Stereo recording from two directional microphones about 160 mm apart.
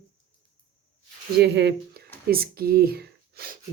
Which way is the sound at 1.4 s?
90° right.